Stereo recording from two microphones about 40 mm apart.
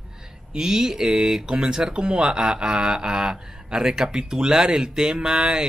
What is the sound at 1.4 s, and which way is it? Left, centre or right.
Speech, right.